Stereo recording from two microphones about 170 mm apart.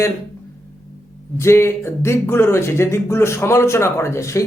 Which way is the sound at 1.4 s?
15° left (ahead or behind).